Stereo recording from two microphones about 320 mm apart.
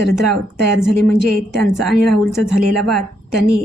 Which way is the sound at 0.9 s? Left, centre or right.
Centre.